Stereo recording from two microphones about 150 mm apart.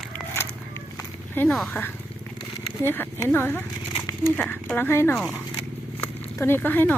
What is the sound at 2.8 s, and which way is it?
Speech, 15° left (ahead or behind).